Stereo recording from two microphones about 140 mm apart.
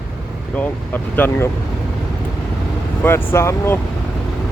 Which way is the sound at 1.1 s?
15° left (ahead or behind).